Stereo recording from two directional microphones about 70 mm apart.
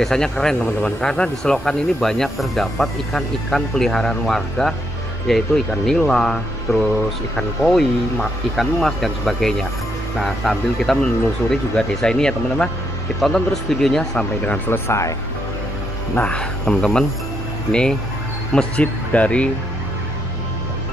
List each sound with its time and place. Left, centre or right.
0.0 s speech: centre
14.4 s speech: left
14.9 s speech: left
16.2 s speech: centre